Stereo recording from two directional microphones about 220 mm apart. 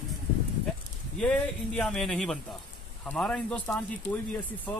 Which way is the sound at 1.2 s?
5° left (ahead or behind).